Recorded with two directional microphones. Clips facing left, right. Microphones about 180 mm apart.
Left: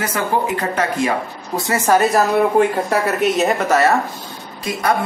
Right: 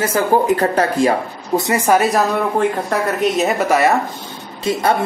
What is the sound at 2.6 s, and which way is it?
Speech, 5° left (ahead or behind).